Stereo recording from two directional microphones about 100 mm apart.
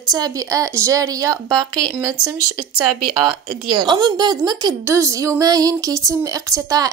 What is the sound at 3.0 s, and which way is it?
Speech, 55° right (ahead or behind).